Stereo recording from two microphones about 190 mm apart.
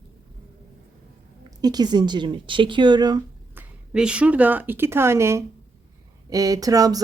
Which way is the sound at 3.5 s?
5° right (ahead or behind).